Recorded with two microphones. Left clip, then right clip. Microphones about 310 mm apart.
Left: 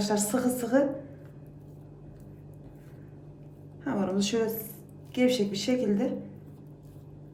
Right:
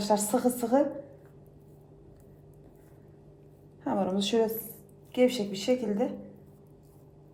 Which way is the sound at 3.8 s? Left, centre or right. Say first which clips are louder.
Right 1 dB; centre.